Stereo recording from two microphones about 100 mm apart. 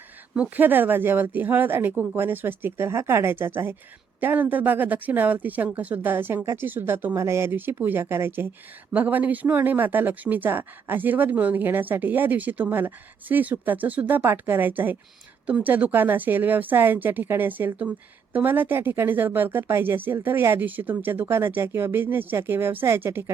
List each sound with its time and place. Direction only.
0.3 s speech: 20° right (ahead or behind)